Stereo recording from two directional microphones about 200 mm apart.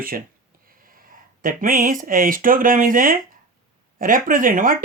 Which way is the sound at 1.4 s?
45° right (ahead or behind).